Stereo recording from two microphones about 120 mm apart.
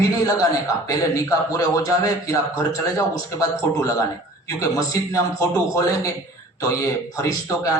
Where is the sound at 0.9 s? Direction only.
25° left (ahead or behind).